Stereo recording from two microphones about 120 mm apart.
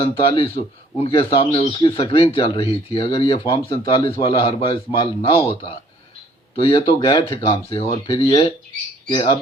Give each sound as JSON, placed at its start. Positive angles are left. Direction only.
{"t": 0.2, "sound": "a man's voice", "side_deg": 50}